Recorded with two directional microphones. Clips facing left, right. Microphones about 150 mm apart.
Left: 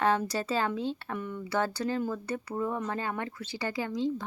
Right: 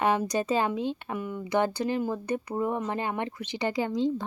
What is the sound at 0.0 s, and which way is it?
Speech, 15° right (ahead or behind).